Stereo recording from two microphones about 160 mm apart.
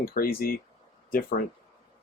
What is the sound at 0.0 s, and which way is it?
Speech, 70° left (ahead or behind).